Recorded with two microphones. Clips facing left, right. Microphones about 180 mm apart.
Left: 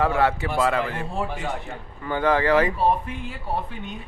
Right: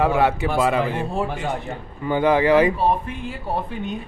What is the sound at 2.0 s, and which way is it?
Speech, 15° right (ahead or behind).